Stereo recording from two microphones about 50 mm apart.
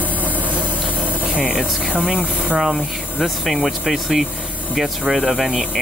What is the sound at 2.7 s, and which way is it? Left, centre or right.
Speech, centre.